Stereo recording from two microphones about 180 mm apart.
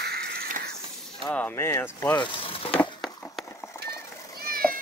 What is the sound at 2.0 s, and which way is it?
Speech, 25° left (ahead or behind).